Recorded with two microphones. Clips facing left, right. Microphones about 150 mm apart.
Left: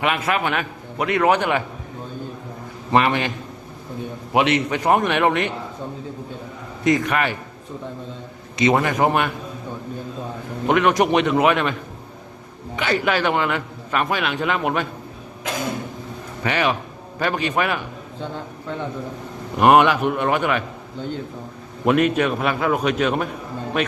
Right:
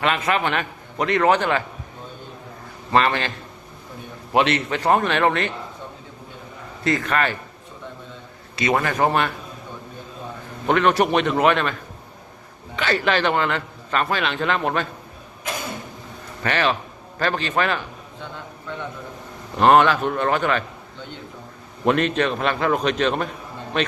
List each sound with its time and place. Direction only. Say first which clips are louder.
0.0 s a man's voice: even; 10° left (ahead or behind)
2.9 s a man's voice: left 1 dB; 15° left (ahead or behind)
6.8 s a man's voice: left 2 dB; 15° left (ahead or behind)
8.5 s a man's voice: left 3 dB; 20° left (ahead or behind)
10.7 s a man's voice: left 1 dB; 10° left (ahead or behind)
16.4 s a man's voice: even; 10° left (ahead or behind)
19.5 s a man's voice: left 1 dB; 15° left (ahead or behind)
21.8 s a man's voice: left 2 dB; 10° left (ahead or behind)